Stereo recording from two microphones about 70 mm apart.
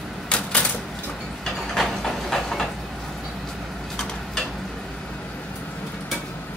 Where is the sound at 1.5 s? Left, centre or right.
Centre.